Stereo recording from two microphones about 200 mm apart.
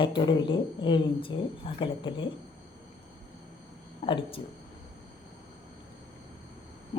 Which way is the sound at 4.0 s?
25° left (ahead or behind).